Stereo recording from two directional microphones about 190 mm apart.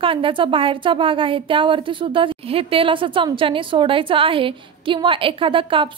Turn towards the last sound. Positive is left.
turn(degrees=-25)  # may be behind; listen again after turning